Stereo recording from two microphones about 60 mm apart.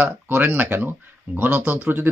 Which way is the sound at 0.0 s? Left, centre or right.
Right.